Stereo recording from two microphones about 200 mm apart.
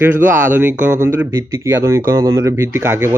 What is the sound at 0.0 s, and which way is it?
Speech, 10° right (ahead or behind).